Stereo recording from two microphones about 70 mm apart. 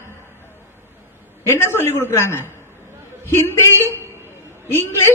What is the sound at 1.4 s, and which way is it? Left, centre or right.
A man's voice, left.